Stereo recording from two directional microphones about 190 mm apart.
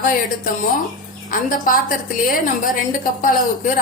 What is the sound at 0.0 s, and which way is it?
A woman's voice, 50° left (ahead or behind).